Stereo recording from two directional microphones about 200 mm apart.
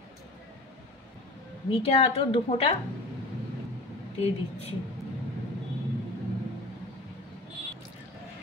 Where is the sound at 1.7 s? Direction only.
30° left (ahead or behind).